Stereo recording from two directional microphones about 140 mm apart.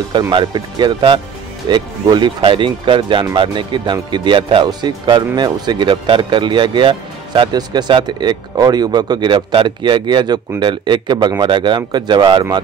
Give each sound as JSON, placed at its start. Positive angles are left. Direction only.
{"t": 0.3, "sound": "speech", "side_deg": -35}